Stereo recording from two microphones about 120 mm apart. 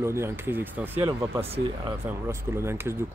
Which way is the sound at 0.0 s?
20° right (ahead or behind).